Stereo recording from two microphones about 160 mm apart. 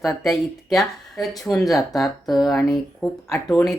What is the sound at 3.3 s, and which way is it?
Speech, 20° left (ahead or behind).